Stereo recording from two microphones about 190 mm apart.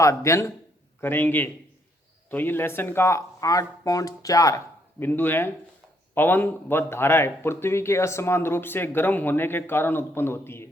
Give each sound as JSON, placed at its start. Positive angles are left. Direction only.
{"t": 0.0, "sound": "speech", "side_deg": 15}